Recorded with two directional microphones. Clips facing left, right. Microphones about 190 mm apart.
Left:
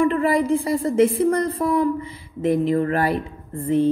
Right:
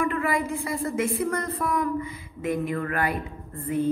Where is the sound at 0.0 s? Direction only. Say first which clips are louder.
Left 7 dB; 30° left (ahead or behind).